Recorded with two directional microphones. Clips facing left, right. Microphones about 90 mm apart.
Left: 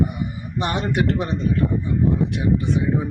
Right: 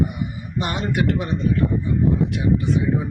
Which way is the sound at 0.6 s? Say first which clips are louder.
Left 1 dB; 30° left (ahead or behind).